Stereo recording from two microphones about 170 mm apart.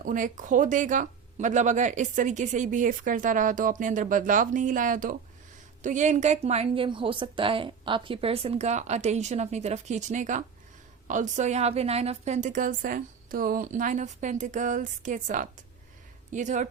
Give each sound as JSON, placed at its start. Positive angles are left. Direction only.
{"t": 0.0, "sound": "a woman's voice", "side_deg": -50}